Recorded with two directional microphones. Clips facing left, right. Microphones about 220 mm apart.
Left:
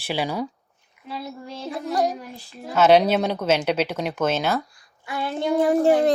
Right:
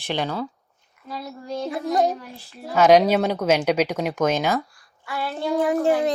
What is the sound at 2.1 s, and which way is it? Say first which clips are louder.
Speech: right 1 dB; 15° left (ahead or behind).